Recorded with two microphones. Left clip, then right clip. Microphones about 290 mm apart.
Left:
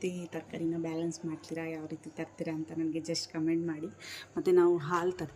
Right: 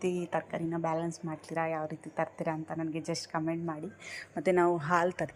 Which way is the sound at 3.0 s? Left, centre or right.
Centre.